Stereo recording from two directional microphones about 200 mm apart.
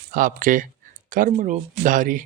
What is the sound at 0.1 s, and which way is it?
Speech, 45° right (ahead or behind).